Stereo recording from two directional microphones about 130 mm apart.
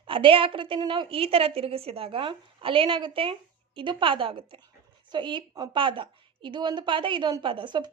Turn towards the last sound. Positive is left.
turn(degrees=-35)  # may be behind; listen again after turning